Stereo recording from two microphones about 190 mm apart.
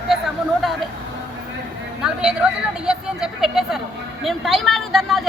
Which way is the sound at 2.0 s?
5° right (ahead or behind).